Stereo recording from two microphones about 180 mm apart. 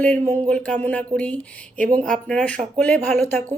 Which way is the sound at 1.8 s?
45° right (ahead or behind).